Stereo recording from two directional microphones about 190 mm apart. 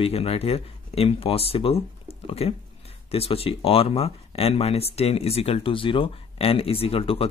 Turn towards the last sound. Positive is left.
turn(degrees=30)  # may be behind; listen again after turning